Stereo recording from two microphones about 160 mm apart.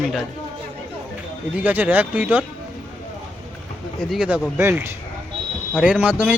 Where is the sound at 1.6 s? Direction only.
10° right (ahead or behind).